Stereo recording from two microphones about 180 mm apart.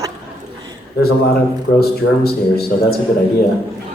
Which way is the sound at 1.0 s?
60° left (ahead or behind).